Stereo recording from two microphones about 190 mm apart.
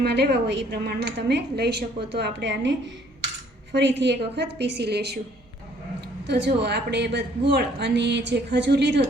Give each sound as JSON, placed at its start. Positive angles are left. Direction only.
{"t": 0.0, "sound": "a woman's voice", "side_deg": -60}
{"t": 3.8, "sound": "a woman's voice", "side_deg": -65}
{"t": 6.2, "sound": "a woman's voice", "side_deg": -65}